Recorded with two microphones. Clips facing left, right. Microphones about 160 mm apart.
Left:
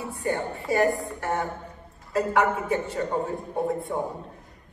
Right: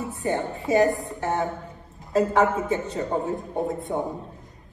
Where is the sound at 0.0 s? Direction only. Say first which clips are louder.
Right 2 dB; 20° right (ahead or behind).